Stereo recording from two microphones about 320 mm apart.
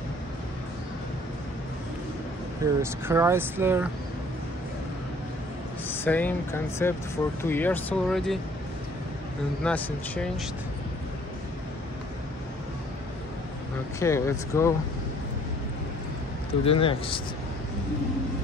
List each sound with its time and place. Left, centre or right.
2.6 s speech: centre
5.9 s speech: centre
9.6 s speech: centre
13.9 s speech: centre
16.6 s speech: centre